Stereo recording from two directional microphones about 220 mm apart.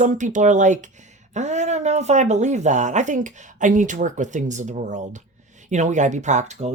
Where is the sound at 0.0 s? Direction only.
35° right (ahead or behind).